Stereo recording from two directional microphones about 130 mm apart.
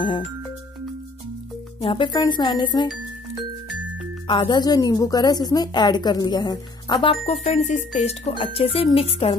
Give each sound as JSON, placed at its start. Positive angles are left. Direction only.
{"t": 1.8, "sound": "a woman's voice", "side_deg": 40}
{"t": 4.3, "sound": "a woman's voice", "side_deg": 35}